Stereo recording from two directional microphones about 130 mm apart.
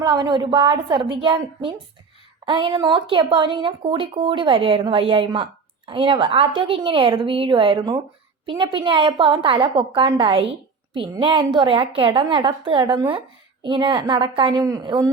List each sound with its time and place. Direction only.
0.0 s speech: 35° right (ahead or behind)